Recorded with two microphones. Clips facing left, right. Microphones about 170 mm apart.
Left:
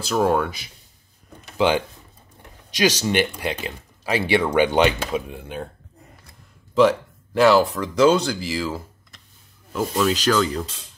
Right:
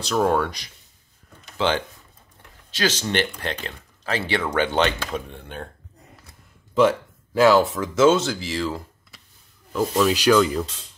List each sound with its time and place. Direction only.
0.0 s rub: 5° left (ahead or behind)
1.6 s speech: 10° left (ahead or behind)
6.7 s speech: centre (ahead or behind)
9.7 s rub: 5° right (ahead or behind)